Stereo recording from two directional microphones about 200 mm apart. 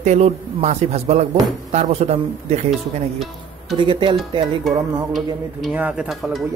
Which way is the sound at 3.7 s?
25° right (ahead or behind).